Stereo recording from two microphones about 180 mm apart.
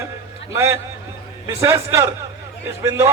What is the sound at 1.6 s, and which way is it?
A man's voice, 15° right (ahead or behind).